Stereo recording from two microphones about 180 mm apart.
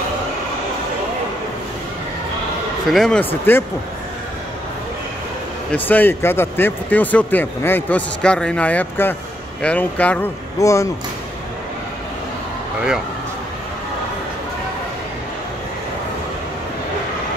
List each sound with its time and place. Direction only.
2.9 s speech: 5° left (ahead or behind)
5.7 s speech: 10° left (ahead or behind)